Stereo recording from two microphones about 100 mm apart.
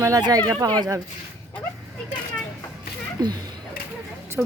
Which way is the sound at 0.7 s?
50° right (ahead or behind).